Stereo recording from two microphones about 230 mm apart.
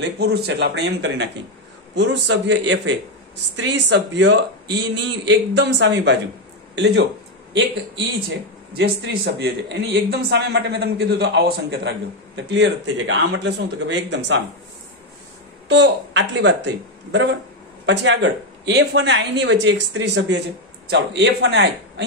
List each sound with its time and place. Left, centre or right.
0.2 s speech: right
8.7 s speech: right
15.7 s speech: right